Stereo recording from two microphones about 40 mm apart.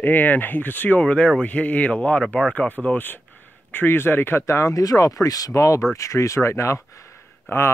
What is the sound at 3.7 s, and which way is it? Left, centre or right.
Speech, left.